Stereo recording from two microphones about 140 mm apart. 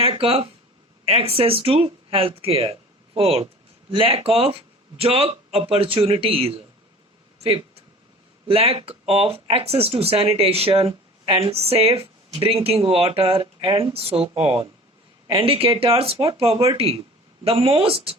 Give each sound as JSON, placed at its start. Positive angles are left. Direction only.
{"t": 0.0, "sound": "speech", "side_deg": -40}
{"t": 8.4, "sound": "speech", "side_deg": -45}